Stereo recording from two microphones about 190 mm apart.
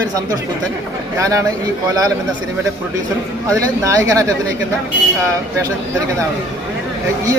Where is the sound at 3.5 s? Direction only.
15° right (ahead or behind).